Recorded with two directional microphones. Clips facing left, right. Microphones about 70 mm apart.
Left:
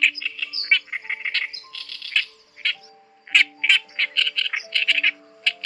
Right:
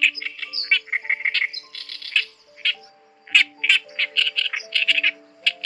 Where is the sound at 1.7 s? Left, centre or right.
Right.